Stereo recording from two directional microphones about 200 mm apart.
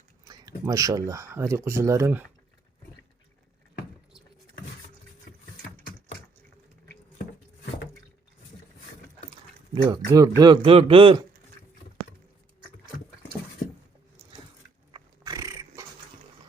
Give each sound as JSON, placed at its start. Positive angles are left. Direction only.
{"t": 0.3, "sound": "speech", "side_deg": -20}
{"t": 9.7, "sound": "a man's voice", "side_deg": -20}
{"t": 14.9, "sound": "dog", "side_deg": -20}